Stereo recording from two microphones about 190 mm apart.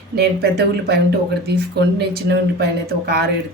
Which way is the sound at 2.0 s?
60° right (ahead or behind).